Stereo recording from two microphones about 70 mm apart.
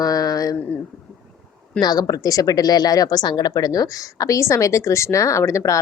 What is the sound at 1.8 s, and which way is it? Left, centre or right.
A woman's voice, left.